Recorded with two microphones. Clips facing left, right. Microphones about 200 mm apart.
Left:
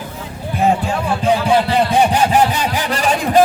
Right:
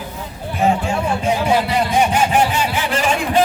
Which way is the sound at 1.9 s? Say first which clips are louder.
Left 2 dB; 35° left (ahead or behind).